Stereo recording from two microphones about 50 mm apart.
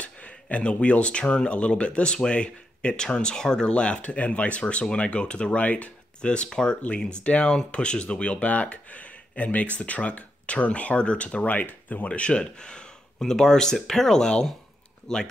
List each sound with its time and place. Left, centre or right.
0.0 s speech: left
6.8 s speech: left
12.1 s speech: centre